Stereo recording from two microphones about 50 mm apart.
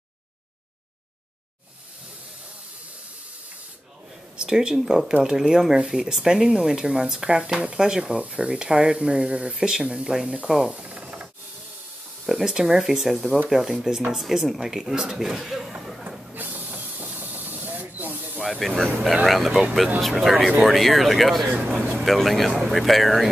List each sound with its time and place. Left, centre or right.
4.4 s speech: centre
8.0 s speech: right
10.7 s rub: right
12.3 s speech: centre
16.3 s printer: right
18.6 s speech: centre
21.5 s speech: right
22.0 s speech: centre